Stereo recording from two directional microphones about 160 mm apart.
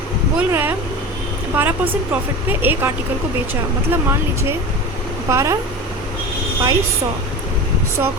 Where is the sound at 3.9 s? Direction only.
15° right (ahead or behind).